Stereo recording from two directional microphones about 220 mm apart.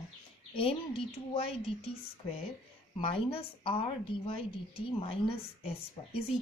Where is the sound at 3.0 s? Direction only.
25° left (ahead or behind).